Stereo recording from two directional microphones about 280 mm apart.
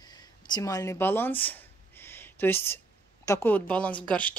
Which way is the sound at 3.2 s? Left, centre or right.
Centre.